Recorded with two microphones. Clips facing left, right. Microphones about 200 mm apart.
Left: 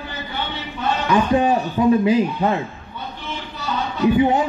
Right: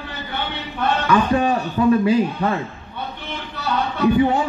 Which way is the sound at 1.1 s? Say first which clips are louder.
Left 2 dB; 20° left (ahead or behind).